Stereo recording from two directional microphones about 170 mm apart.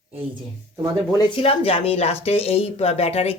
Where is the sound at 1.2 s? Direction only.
35° left (ahead or behind).